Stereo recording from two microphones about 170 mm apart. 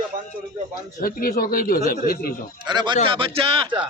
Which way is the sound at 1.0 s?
60° left (ahead or behind).